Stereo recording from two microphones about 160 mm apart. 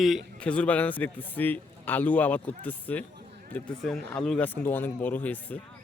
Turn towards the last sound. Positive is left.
turn(degrees=10)  # may be behind; listen again after turning